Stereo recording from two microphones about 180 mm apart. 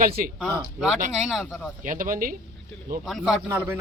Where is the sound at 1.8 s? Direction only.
45° right (ahead or behind).